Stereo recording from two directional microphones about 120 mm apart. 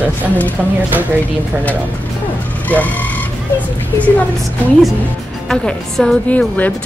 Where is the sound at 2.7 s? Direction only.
15° left (ahead or behind).